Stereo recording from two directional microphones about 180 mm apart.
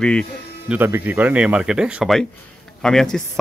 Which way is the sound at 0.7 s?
10° right (ahead or behind).